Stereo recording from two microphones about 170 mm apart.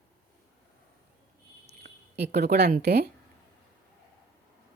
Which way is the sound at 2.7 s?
75° right (ahead or behind).